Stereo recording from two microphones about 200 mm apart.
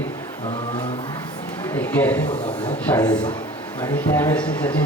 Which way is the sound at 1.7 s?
10° left (ahead or behind).